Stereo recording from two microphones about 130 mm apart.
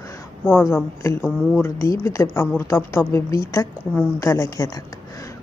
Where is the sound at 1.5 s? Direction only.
20° left (ahead or behind).